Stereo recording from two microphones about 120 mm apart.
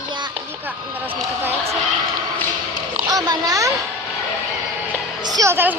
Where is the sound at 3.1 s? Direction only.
30° right (ahead or behind).